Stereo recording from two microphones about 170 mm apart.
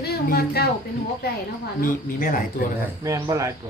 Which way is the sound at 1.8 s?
55° left (ahead or behind).